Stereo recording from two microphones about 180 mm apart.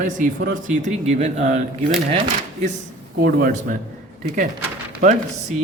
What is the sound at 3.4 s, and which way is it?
Speech, 50° right (ahead or behind).